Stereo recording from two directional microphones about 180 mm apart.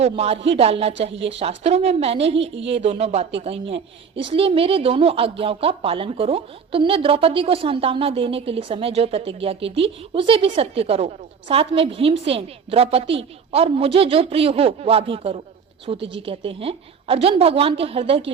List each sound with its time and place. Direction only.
0.0 s a woman's voice: 35° right (ahead or behind)